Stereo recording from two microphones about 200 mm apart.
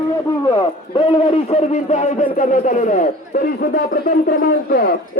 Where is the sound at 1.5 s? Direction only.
35° left (ahead or behind).